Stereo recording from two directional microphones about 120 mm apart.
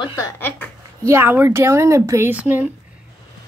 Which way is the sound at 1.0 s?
20° right (ahead or behind).